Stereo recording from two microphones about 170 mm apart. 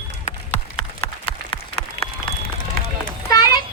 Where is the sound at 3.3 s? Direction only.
20° left (ahead or behind).